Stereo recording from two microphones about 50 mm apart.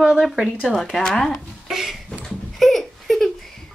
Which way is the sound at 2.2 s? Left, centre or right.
Centre.